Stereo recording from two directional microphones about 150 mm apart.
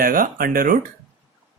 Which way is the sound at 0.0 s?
70° right (ahead or behind).